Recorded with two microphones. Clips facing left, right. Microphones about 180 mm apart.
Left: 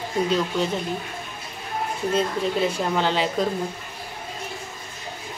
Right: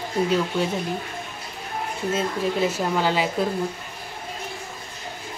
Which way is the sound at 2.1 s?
5° right (ahead or behind).